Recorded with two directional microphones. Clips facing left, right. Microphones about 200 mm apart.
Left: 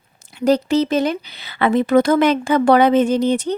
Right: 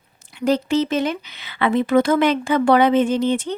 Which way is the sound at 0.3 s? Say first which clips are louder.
Left 3 dB; 40° left (ahead or behind).